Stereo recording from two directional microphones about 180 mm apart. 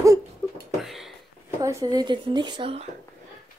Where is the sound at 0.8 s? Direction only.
Centre (ahead or behind).